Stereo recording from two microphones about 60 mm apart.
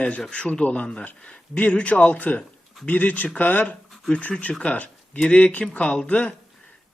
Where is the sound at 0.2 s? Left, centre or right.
Centre.